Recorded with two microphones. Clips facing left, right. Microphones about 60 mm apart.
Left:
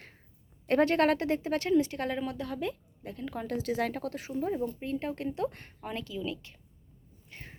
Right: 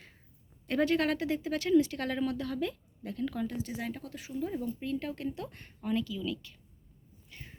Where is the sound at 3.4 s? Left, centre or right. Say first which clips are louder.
Left 6 dB; left.